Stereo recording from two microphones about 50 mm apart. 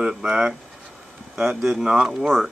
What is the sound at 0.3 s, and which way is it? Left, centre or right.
Mantra, centre.